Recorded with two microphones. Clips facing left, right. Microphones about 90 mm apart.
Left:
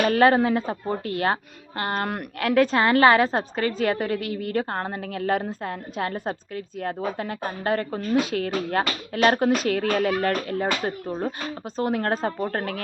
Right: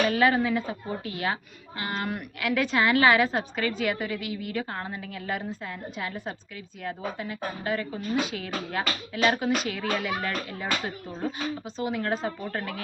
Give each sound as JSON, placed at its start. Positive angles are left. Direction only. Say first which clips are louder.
{"t": 0.0, "sound": "a woman's voice", "louder": "left 5 dB", "side_deg": 45}